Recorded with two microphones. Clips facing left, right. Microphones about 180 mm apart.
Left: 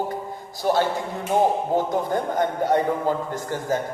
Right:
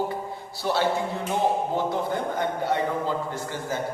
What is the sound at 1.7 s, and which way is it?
A man's voice, 45° left (ahead or behind).